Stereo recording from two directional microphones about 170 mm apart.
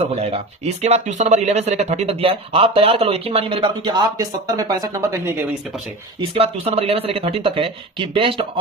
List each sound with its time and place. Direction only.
0.0 s speech: 35° right (ahead or behind); by 5.5 s 15° right (ahead or behind)
6.3 s speech: 35° right (ahead or behind)